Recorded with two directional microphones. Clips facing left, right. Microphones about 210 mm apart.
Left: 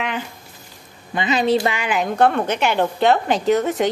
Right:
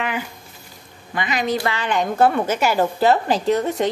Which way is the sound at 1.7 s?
10° left (ahead or behind).